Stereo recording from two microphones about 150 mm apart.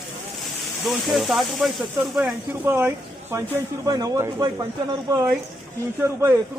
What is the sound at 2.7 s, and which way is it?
Speech, 15° right (ahead or behind).